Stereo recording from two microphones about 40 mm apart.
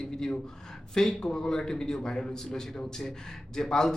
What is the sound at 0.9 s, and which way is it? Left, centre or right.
A man's voice, centre.